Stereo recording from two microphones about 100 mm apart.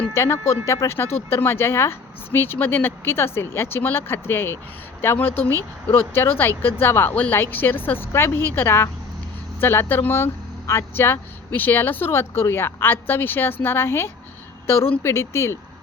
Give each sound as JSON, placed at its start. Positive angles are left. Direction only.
{"t": 0.1, "sound": "speech", "side_deg": 25}